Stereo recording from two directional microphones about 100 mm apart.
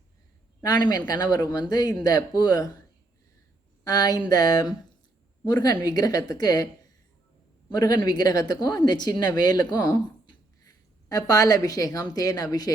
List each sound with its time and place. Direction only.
0.6 s a woman's voice: 40° left (ahead or behind)
3.8 s a woman's voice: 40° left (ahead or behind)
7.7 s a woman's voice: 40° left (ahead or behind)